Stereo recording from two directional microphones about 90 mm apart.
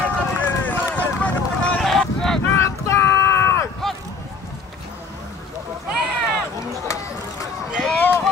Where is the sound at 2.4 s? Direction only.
30° left (ahead or behind).